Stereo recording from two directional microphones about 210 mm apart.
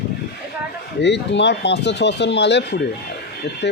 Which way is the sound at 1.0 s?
55° left (ahead or behind).